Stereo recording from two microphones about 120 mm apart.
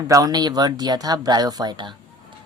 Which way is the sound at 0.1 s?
30° right (ahead or behind).